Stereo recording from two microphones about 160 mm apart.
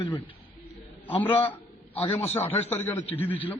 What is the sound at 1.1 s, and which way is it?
Speech, 10° left (ahead or behind).